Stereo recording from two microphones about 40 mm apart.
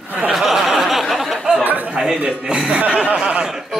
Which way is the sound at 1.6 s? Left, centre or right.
Right.